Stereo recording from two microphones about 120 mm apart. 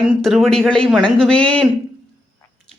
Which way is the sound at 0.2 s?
Centre (ahead or behind).